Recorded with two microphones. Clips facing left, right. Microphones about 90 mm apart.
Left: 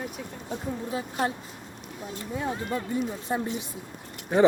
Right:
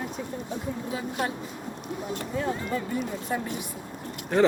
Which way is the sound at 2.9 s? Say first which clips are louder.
Left 1 dB; 25° left (ahead or behind).